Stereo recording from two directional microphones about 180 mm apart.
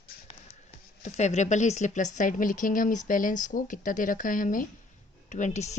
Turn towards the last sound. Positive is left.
turn(degrees=40)  # may be behind; listen again after turning